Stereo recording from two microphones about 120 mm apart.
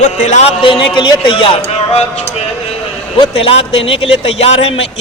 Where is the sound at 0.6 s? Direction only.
45° left (ahead or behind).